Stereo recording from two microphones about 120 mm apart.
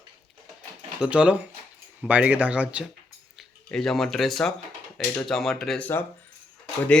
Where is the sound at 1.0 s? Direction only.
10° right (ahead or behind).